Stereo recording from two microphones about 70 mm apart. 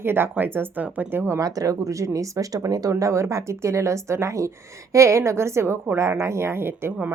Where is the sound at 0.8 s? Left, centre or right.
Centre.